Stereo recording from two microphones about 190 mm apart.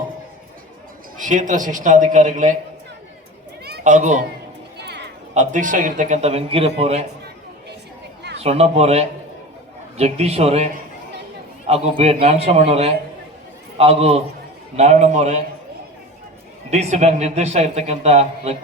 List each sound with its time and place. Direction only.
1.2 s a man's voice: 40° right (ahead or behind)
3.8 s a man's voice: 40° right (ahead or behind)
4.8 s music: 65° right (ahead or behind)
5.3 s a man's voice: 40° right (ahead or behind)
8.4 s a man's voice: 35° right (ahead or behind)
11.7 s a man's voice: 30° right (ahead or behind)
16.6 s a man's voice: 35° right (ahead or behind)